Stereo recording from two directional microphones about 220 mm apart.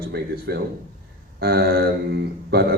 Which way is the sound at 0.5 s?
50° right (ahead or behind).